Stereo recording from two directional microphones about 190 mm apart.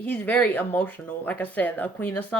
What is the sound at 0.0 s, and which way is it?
Speech, 10° left (ahead or behind).